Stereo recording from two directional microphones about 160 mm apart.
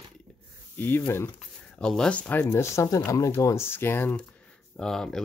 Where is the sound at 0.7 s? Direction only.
15° left (ahead or behind).